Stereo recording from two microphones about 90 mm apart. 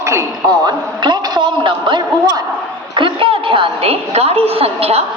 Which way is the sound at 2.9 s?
75° right (ahead or behind).